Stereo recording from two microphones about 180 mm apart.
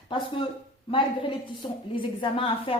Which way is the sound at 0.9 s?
30° left (ahead or behind).